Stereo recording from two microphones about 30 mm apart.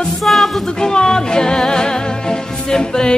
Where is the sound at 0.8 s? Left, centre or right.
Left.